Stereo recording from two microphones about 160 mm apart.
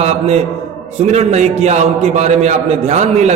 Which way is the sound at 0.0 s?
40° right (ahead or behind).